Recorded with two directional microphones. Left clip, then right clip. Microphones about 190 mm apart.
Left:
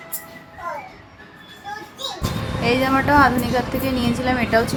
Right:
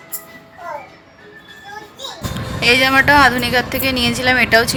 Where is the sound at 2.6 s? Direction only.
65° right (ahead or behind).